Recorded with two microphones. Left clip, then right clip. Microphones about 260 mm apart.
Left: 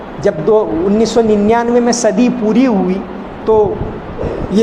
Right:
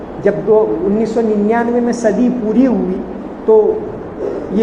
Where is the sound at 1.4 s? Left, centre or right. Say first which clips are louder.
Left 3 dB; left.